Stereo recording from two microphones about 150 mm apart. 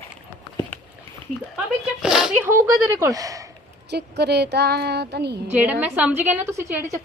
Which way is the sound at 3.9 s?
90° right.